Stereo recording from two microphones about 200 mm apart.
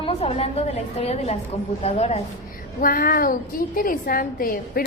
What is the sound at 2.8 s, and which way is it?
A woman's voice, 45° left (ahead or behind).